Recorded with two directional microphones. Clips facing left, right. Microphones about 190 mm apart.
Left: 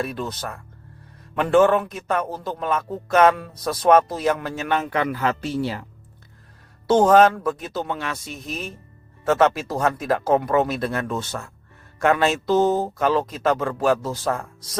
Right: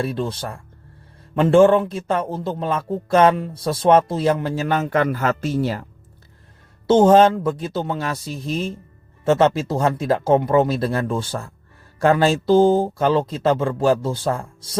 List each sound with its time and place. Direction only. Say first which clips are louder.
0.0 s a man's voice: right 3 dB; 30° right (ahead or behind)
6.8 s a man's voice: right 2 dB; 25° right (ahead or behind)